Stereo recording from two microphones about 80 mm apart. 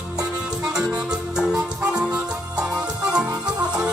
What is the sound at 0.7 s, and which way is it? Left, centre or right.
Music, centre.